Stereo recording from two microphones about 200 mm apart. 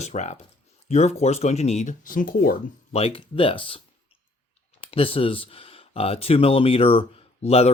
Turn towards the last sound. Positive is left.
turn(degrees=30)  # may be behind; listen again after turning